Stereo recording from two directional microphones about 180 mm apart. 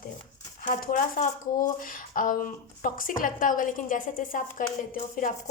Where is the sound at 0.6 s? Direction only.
45° left (ahead or behind).